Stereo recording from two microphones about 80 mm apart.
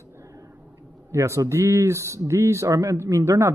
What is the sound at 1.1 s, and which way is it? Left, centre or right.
Speech, right.